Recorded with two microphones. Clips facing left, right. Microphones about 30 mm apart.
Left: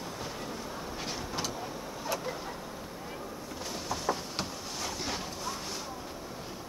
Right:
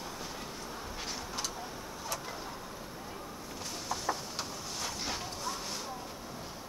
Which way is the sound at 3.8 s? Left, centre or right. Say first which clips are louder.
Left 2 dB; centre.